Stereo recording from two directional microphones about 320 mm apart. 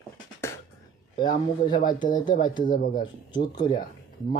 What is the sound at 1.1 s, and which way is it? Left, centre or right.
Speech, centre.